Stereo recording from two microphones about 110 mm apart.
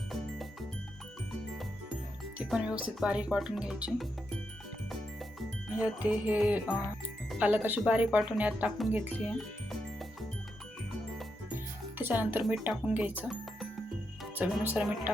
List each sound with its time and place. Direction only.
2.5 s speech: 10° right (ahead or behind)
5.7 s speech: 15° right (ahead or behind)
11.5 s music: 20° right (ahead or behind)
12.6 s speech: 15° right (ahead or behind)
14.6 s speech: 15° right (ahead or behind)